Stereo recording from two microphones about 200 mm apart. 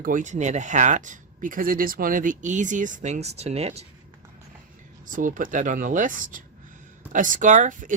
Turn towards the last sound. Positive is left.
turn(degrees=-40)  # may be behind; listen again after turning